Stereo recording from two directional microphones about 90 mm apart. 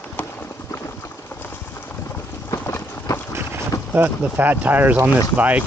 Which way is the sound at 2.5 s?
30° left (ahead or behind).